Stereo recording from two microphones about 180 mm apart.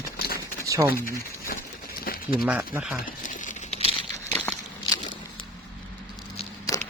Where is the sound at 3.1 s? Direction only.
45° left (ahead or behind).